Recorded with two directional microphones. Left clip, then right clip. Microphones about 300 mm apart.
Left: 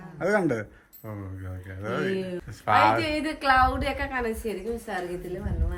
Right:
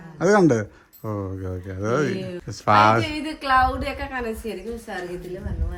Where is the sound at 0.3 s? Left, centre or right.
Centre.